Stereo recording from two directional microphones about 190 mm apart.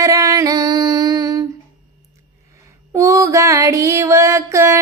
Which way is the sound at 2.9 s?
15° right (ahead or behind).